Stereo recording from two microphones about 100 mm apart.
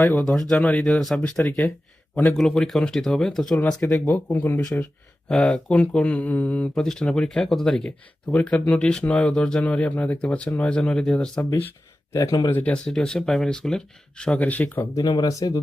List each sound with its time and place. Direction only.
0.0 s speech: 20° left (ahead or behind)
0.3 s speech: 5° left (ahead or behind)
2.3 s speech: 5° left (ahead or behind)
3.6 s speech: 20° left (ahead or behind)
12.1 s speech: 35° left (ahead or behind)
12.5 s speech: 20° left (ahead or behind)
12.7 s speech: 10° left (ahead or behind)
14.9 s speech: 45° left (ahead or behind)